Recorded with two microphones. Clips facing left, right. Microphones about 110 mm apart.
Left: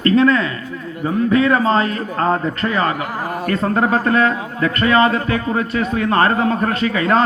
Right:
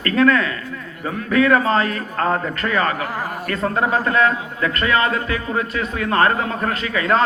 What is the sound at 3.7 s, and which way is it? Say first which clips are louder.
A man's voice: left 2 dB; 40° left (ahead or behind).